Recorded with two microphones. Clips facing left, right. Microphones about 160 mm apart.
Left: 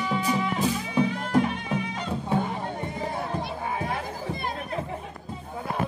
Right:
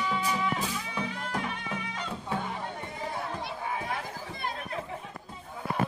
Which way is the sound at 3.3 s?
35° left (ahead or behind).